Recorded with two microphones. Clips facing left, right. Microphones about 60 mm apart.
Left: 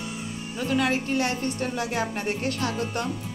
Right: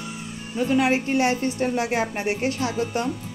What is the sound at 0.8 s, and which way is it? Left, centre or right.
A woman's voice, right.